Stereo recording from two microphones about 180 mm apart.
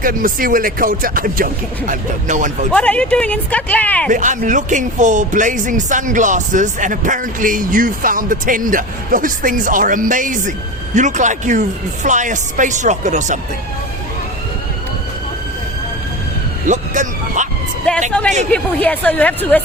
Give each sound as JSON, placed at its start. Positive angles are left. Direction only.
{"t": 0.0, "sound": "speech", "side_deg": -50}
{"t": 2.7, "sound": "speech", "side_deg": 5}
{"t": 4.1, "sound": "speech", "side_deg": -45}
{"t": 16.6, "sound": "a sound", "side_deg": -45}
{"t": 18.1, "sound": "speech", "side_deg": 5}